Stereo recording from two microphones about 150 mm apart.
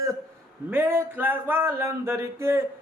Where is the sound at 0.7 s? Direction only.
15° right (ahead or behind).